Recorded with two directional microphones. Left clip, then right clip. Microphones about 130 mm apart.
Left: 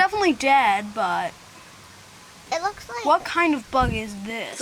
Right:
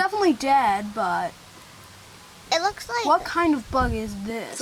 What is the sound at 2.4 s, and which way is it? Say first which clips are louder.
Speech: right 3 dB; 40° right (ahead or behind).